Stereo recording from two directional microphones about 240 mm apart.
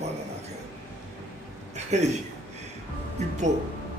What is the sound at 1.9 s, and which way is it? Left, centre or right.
Speech, right.